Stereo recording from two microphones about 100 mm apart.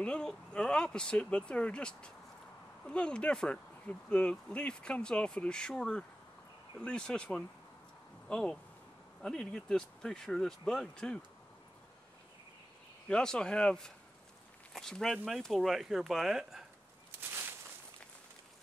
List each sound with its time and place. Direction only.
0.0 s speech: 10° left (ahead or behind)
13.1 s speech: 10° left (ahead or behind)
17.2 s a sound: 20° right (ahead or behind)